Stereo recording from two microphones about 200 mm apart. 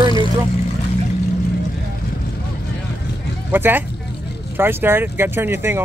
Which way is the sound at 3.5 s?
10° right (ahead or behind).